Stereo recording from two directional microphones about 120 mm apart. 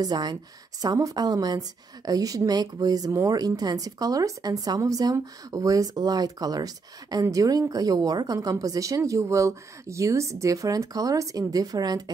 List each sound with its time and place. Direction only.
0.0 s a woman's voice: 35° right (ahead or behind)